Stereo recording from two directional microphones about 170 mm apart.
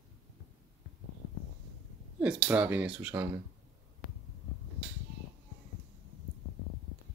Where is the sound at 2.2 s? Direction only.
10° right (ahead or behind).